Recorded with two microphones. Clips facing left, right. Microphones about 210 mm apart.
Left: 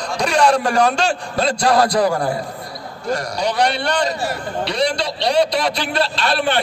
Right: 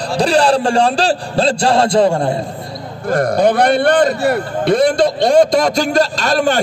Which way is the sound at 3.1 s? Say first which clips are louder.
Right 8 dB; 55° right (ahead or behind).